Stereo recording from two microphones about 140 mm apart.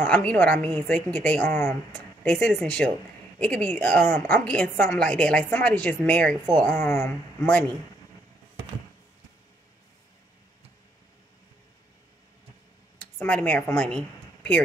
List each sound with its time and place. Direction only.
0.0 s a woman's voice: 10° left (ahead or behind)
13.0 s speech: 10° left (ahead or behind)